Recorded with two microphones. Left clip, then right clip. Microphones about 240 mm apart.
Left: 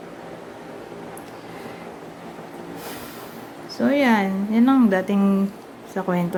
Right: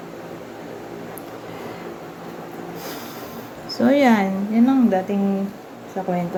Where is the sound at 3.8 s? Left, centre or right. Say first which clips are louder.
Right 3 dB; centre.